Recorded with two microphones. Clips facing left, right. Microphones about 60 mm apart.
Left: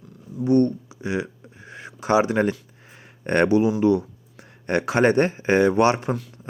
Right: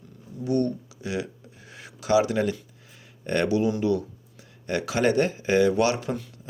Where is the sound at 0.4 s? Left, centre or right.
Left.